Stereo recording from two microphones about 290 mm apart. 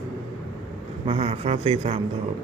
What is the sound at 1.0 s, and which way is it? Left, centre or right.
Speech, centre.